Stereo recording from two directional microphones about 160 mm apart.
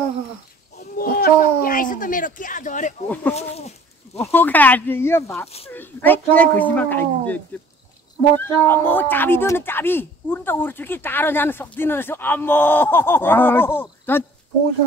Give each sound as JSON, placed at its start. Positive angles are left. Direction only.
{"t": 0.7, "sound": "a sound", "side_deg": 65}
{"t": 3.3, "sound": "goat", "side_deg": 40}
{"t": 4.2, "sound": "speech", "side_deg": 10}